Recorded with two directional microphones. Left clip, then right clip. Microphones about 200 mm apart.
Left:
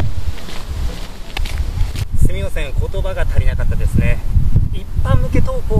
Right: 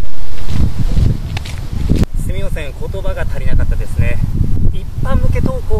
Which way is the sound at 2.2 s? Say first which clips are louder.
Even; centre (ahead or behind).